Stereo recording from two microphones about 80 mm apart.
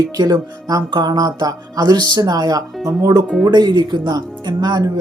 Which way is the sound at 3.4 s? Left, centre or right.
Right.